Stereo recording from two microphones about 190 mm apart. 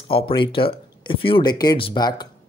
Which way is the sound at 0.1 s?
25° left (ahead or behind).